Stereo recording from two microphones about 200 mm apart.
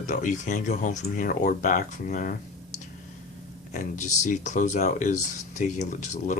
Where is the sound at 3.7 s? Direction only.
35° left (ahead or behind).